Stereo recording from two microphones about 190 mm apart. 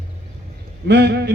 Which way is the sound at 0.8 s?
60° right (ahead or behind).